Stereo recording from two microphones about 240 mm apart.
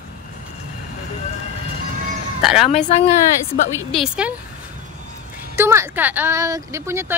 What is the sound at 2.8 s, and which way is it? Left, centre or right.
Speech, left.